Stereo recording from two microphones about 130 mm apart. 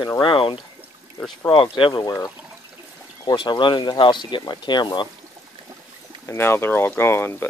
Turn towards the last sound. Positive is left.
turn(degrees=20)  # may be behind; listen again after turning